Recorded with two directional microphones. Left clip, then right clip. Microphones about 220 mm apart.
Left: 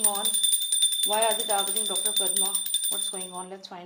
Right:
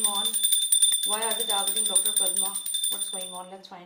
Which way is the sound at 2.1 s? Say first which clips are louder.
Left 1 dB; 40° left (ahead or behind).